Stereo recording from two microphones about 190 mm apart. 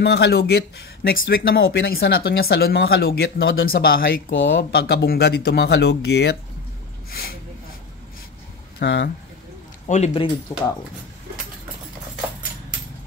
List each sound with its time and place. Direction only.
0.0 s speech: 60° left (ahead or behind)
1.6 s speech: 85° left
2.0 s speech: 60° left (ahead or behind)
4.3 s speech: 75° left (ahead or behind); by 6.3 s 60° left (ahead or behind)
8.7 s speech: 65° left (ahead or behind)
9.8 s speech: 35° left (ahead or behind)